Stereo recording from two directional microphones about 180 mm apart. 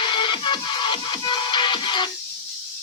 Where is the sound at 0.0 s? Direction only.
25° left (ahead or behind).